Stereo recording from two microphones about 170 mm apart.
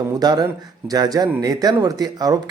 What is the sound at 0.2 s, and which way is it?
Speech, 25° right (ahead or behind).